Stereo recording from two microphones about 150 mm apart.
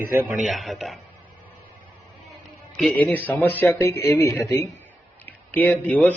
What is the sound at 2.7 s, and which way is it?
Speech, centre (ahead or behind).